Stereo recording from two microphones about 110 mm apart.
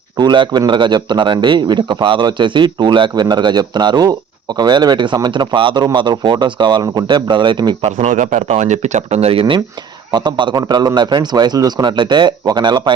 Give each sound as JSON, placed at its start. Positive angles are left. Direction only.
{"t": 0.2, "sound": "a man's voice", "side_deg": -40}
{"t": 7.8, "sound": "speech", "side_deg": -85}
{"t": 10.1, "sound": "a man's voice", "side_deg": -40}